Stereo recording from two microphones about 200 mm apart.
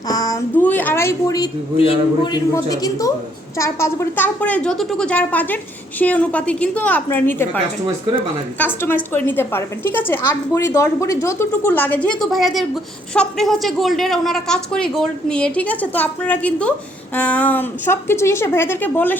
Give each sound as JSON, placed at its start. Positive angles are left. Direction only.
{"t": 0.1, "sound": "a woman's voice", "side_deg": 20}